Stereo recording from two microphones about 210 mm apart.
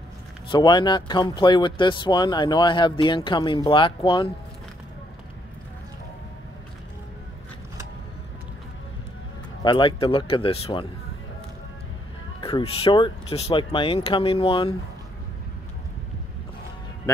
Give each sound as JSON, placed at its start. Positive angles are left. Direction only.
{"t": 0.5, "sound": "speech", "side_deg": 20}
{"t": 9.6, "sound": "speech", "side_deg": 20}
{"t": 12.4, "sound": "speech", "side_deg": 25}